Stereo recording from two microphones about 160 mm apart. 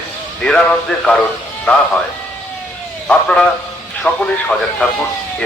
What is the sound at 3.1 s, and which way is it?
Speech, 5° left (ahead or behind).